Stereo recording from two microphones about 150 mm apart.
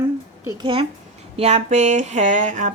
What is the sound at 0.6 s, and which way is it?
Speech, 35° right (ahead or behind).